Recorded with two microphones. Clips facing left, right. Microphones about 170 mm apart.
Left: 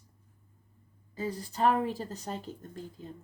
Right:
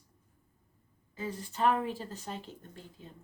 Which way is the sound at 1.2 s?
35° left (ahead or behind).